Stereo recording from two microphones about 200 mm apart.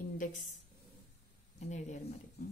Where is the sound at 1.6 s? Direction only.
35° left (ahead or behind).